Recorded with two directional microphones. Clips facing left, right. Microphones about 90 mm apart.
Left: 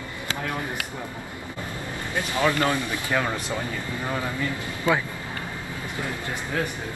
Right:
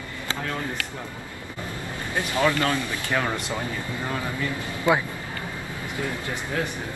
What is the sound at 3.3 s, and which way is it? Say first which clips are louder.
Speech: even; 15° right (ahead or behind).